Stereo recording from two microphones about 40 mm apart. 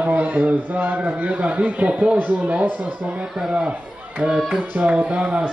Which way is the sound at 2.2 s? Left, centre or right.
Right.